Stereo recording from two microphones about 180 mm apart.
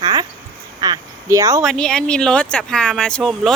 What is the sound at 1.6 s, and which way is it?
Speech, 5° left (ahead or behind).